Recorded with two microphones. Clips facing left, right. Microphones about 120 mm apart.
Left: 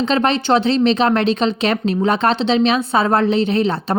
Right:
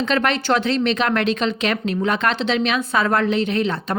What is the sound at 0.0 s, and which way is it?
Speech, 25° left (ahead or behind).